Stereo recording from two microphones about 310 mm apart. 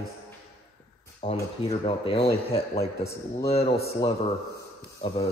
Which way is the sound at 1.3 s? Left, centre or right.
Centre.